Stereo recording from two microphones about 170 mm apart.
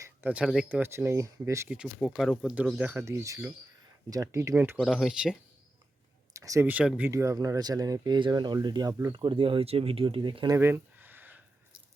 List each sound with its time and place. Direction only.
0.0 s speech: 10° right (ahead or behind)
1.7 s speech: centre (ahead or behind)
4.9 s speech: centre (ahead or behind)
6.3 s speech: 20° right (ahead or behind)
7.1 s speech: 20° right (ahead or behind)
10.6 s a sound: 10° right (ahead or behind)